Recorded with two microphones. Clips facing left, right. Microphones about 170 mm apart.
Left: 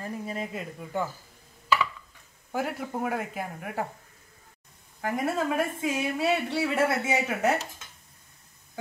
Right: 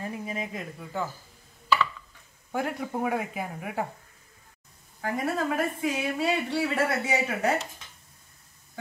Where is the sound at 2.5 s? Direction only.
Centre (ahead or behind).